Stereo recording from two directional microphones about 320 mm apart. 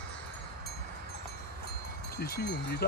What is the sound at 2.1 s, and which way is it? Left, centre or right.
Speech, left.